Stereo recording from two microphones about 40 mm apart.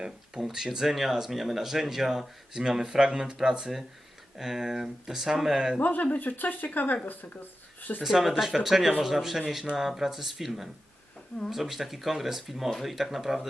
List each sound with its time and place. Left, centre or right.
0.4 s speech: centre
4.4 s speech: centre
5.8 s speech: left
8.0 s speech: centre